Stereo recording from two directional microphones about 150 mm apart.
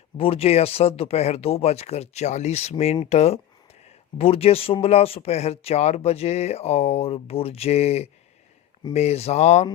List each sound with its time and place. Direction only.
0.2 s speech: 40° left (ahead or behind)